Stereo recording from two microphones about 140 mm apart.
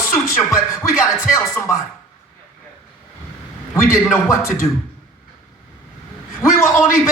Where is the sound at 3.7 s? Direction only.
20° left (ahead or behind).